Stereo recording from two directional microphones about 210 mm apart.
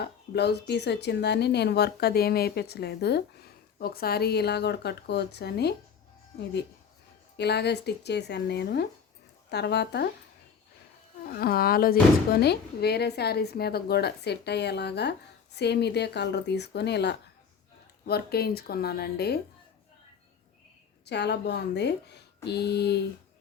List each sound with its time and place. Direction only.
0.0 s speech: 50° left (ahead or behind)
7.3 s speech: 50° left (ahead or behind)
11.3 s speech: 45° left (ahead or behind)
21.0 s speech: 55° left (ahead or behind)